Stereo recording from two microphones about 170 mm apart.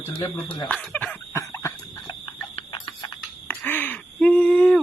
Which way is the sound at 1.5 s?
20° left (ahead or behind).